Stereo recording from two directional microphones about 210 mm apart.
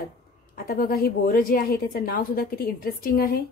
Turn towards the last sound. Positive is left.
turn(degrees=45)  # may be behind; listen again after turning